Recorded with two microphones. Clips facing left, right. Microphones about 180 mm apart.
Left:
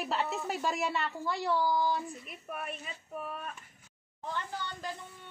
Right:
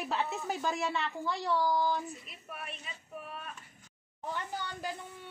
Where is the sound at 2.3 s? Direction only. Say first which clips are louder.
Left 5 dB; 45° left (ahead or behind).